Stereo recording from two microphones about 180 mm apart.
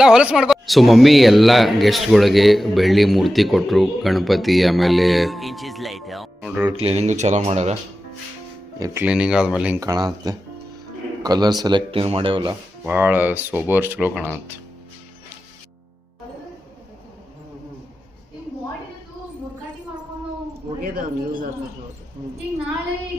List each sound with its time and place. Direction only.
0.0 s a man's voice: 5° right (ahead or behind)
6.7 s speech: 30° right (ahead or behind)
8.8 s speech: 15° right (ahead or behind)
9.0 s a man's voice: 5° right (ahead or behind)
9.8 s speech: 20° right (ahead or behind)
12.8 s speech: 10° right (ahead or behind)
20.8 s a man's voice: 55° right (ahead or behind)